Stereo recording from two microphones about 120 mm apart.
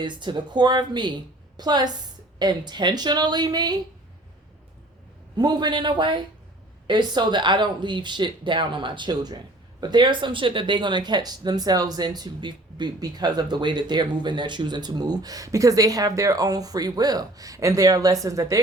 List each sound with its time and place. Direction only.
0.0 s speech: 40° right (ahead or behind)
5.4 s speech: 35° right (ahead or behind)